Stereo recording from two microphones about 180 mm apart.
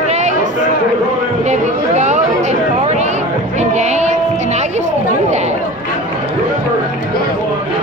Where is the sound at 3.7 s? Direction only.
40° right (ahead or behind).